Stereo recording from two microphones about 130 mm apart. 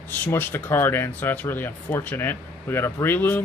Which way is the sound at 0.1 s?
15° left (ahead or behind).